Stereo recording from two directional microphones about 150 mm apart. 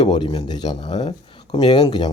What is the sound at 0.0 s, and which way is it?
Speech, 30° left (ahead or behind).